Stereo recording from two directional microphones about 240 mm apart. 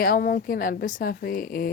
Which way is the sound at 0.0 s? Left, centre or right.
Left.